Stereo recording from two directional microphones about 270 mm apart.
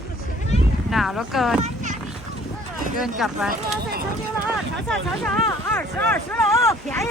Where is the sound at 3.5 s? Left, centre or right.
Right.